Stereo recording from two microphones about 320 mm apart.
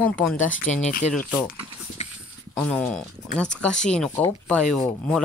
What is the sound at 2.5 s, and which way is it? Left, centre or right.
Speech, centre.